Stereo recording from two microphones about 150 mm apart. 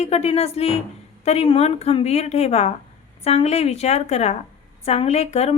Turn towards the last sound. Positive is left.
turn(degrees=45)  # may be behind; listen again after turning